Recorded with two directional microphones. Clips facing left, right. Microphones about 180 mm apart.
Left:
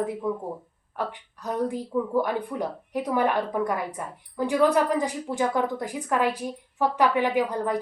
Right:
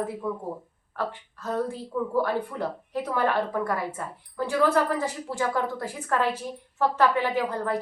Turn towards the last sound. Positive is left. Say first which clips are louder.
# left 2 dB
turn(degrees=15)  # may be behind; listen again after turning